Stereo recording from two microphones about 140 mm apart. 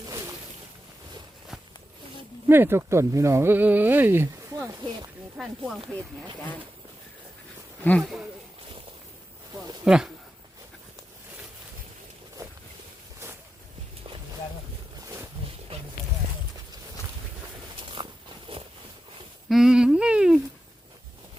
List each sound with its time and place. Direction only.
2.5 s speech: 15° right (ahead or behind)
4.8 s speech: 30° right (ahead or behind)
5.4 s speech: centre (ahead or behind)
7.9 s speech: 5° left (ahead or behind)
9.8 s speech: 5° right (ahead or behind)
15.0 s wild animals: 20° right (ahead or behind)
19.5 s humming: 5° right (ahead or behind)